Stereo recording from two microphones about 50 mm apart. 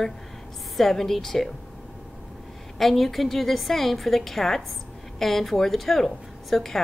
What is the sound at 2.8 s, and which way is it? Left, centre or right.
A woman's voice, centre.